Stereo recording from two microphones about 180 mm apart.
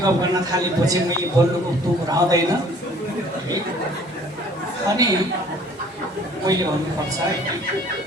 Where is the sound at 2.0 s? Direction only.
20° right (ahead or behind).